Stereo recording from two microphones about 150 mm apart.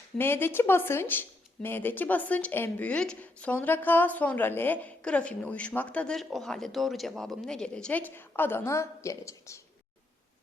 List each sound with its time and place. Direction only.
0.2 s speech: 15° left (ahead or behind)